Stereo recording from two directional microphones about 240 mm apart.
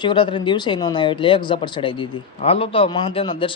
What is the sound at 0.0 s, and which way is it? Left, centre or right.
Speech, centre.